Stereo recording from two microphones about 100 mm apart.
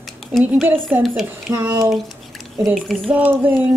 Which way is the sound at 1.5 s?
20° right (ahead or behind).